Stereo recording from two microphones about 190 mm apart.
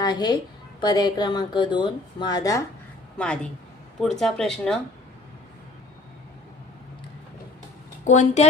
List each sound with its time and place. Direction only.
0.0 s a woman's voice: 25° left (ahead or behind)
3.2 s speech: 5° left (ahead or behind)
8.0 s speech: 40° left (ahead or behind)